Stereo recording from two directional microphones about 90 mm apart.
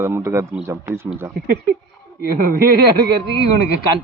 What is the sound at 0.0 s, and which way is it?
A man's voice, 30° right (ahead or behind).